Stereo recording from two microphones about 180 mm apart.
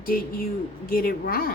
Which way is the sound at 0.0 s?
55° left (ahead or behind).